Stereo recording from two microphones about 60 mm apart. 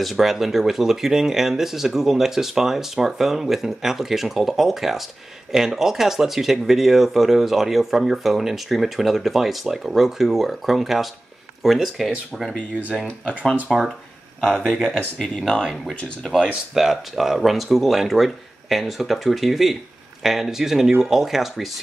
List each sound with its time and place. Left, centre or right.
0.0 s speech: centre
13.7 s speech: centre
15.1 s speech: centre
16.7 s speech: centre